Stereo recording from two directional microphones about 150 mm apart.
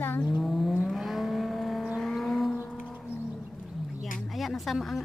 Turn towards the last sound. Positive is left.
turn(degrees=0)  # may be behind; listen again after turning